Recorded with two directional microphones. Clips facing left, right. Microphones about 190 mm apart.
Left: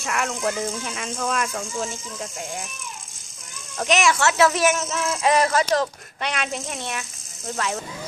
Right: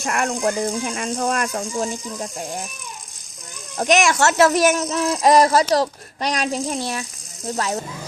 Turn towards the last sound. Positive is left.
turn(degrees=-40)  # may be behind; listen again after turning